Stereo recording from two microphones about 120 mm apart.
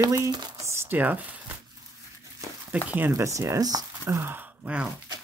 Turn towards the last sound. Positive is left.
turn(degrees=-10)  # may be behind; listen again after turning